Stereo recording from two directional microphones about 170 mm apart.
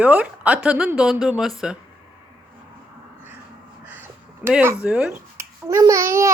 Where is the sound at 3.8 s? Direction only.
10° right (ahead or behind).